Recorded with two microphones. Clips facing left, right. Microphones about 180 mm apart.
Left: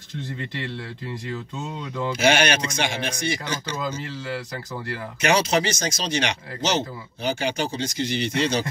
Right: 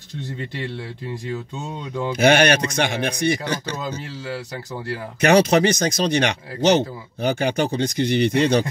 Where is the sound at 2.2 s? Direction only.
55° right (ahead or behind).